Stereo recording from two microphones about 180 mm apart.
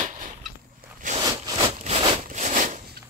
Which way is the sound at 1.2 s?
25° right (ahead or behind).